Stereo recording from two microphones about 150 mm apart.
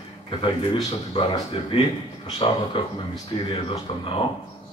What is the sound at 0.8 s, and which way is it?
Speech, 40° left (ahead or behind).